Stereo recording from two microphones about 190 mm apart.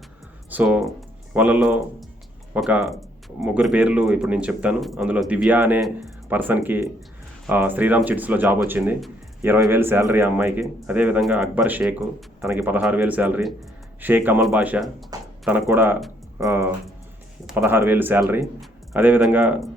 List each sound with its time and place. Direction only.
0.5 s a man's voice: 5° right (ahead or behind)
15.1 s a sound: 20° right (ahead or behind)
15.4 s a man's voice: 10° right (ahead or behind)